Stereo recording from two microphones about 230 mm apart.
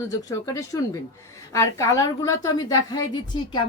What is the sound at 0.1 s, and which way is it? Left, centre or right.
A woman's voice, centre.